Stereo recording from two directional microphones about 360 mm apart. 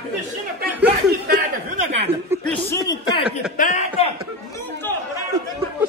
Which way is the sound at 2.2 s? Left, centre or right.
Centre.